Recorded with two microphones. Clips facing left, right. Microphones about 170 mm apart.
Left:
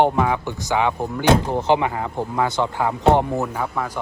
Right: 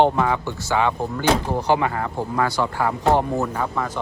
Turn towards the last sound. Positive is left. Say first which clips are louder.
# even
turn(degrees=10)  # may be behind; listen again after turning